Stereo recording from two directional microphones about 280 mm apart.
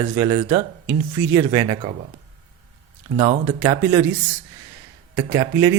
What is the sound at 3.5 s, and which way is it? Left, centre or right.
Speech, centre.